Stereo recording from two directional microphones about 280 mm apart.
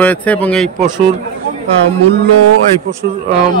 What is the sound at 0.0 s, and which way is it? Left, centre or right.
Speech, centre.